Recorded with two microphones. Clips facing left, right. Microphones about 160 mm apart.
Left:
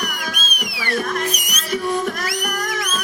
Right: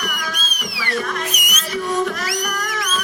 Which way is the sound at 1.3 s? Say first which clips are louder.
Left 1 dB; 35° left (ahead or behind).